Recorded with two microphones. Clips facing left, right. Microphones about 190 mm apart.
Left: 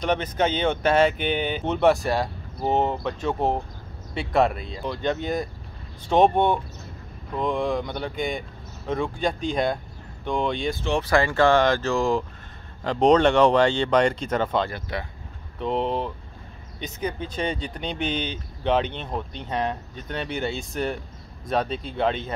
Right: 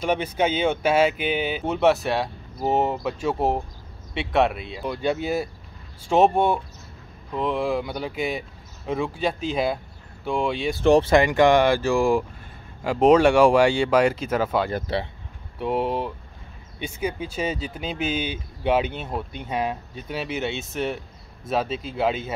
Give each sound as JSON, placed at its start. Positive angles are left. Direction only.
{"t": 0.0, "sound": "speech", "side_deg": -10}
{"t": 11.0, "sound": "speech", "side_deg": -20}
{"t": 14.9, "sound": "speech", "side_deg": -30}
{"t": 15.6, "sound": "speech", "side_deg": -10}